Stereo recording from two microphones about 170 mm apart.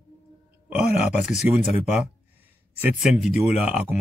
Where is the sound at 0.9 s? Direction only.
40° left (ahead or behind).